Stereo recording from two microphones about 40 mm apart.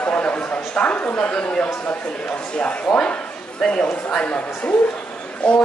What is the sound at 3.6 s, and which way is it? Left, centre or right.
Speech, left.